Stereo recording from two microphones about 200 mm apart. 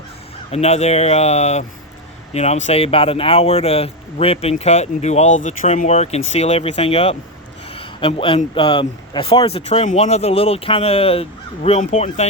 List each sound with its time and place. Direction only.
0.5 s speech: 30° left (ahead or behind)